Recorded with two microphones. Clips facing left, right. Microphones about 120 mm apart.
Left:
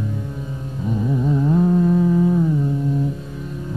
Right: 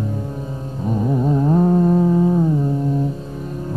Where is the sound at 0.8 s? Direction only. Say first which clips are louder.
Right 2 dB; 45° right (ahead or behind).